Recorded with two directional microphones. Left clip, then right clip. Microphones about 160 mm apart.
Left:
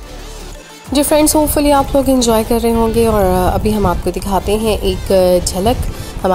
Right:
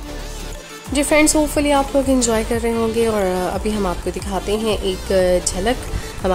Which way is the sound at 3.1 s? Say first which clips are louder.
Left 6 dB; 10° left (ahead or behind).